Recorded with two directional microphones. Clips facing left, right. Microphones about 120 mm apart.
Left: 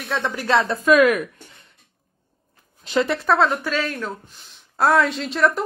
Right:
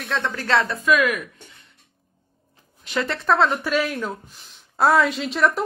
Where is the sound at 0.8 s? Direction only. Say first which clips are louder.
Left 8 dB; 40° left (ahead or behind).